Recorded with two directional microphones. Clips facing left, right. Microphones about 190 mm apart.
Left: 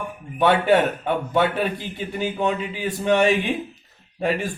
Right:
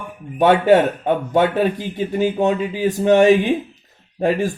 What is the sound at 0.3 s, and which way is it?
Speech, 45° right (ahead or behind).